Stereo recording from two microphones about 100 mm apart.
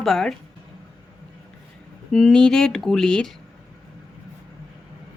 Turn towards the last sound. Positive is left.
turn(degrees=5)  # may be behind; listen again after turning